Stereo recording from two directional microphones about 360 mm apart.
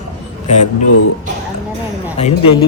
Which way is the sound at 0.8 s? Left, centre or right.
Left.